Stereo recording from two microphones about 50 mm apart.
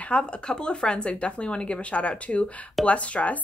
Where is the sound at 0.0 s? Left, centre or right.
Left.